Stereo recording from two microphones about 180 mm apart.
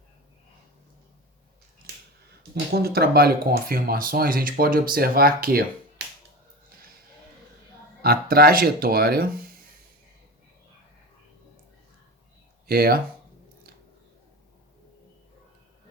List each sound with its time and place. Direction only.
2.7 s speech: 60° right (ahead or behind)
8.0 s speech: 55° right (ahead or behind)
12.6 s speech: 60° right (ahead or behind)